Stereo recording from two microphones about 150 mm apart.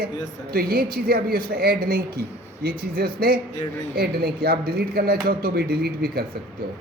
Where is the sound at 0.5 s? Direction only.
85° right.